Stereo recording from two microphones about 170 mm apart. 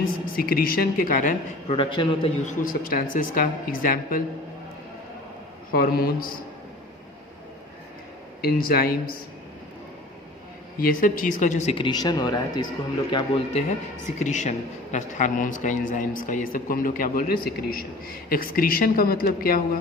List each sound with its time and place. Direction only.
0.0 s a woman's voice: 60° left (ahead or behind)
1.7 s speech: 30° left (ahead or behind)
2.8 s a man's voice: 55° left (ahead or behind)
5.7 s a man's voice: 60° left (ahead or behind)
8.4 s a man's voice: 65° left (ahead or behind)
10.8 s a woman's voice: 55° left (ahead or behind)